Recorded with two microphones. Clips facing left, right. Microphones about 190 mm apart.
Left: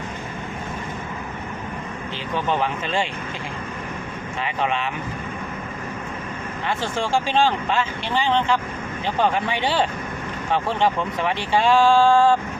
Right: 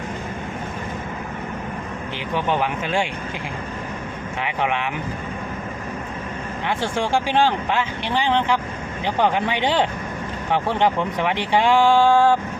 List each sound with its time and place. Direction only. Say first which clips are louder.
2.3 s speech: right 1 dB; 15° right (ahead or behind)
4.4 s speech: right 1 dB; 15° right (ahead or behind)
6.7 s speech: right 1 dB; 15° right (ahead or behind)